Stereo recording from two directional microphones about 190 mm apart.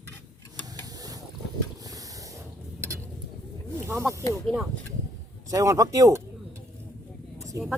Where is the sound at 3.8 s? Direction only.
15° right (ahead or behind).